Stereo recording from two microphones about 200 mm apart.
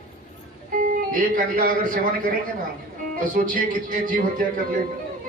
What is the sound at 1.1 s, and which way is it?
A man's voice, 45° right (ahead or behind).